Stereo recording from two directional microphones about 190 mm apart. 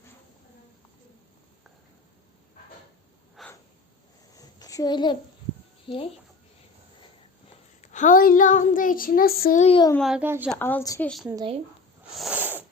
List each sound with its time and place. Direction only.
3.4 s snort: centre (ahead or behind)
4.4 s a sound: 20° left (ahead or behind)
5.9 s speech: 30° left (ahead or behind)
7.8 s child singing: 40° left (ahead or behind)
9.6 s speech: 30° left (ahead or behind)
10.0 s speech: 5° right (ahead or behind)
10.5 s a woman's voice: 10° left (ahead or behind)
12.1 s a sound: 5° right (ahead or behind)